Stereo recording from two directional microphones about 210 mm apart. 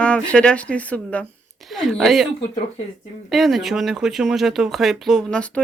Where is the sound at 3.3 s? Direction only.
Centre (ahead or behind).